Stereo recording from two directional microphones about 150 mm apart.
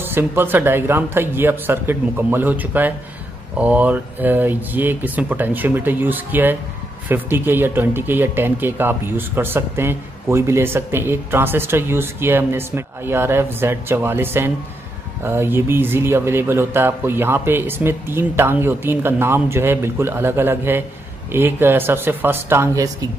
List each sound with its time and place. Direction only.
0.0 s speech: 15° right (ahead or behind)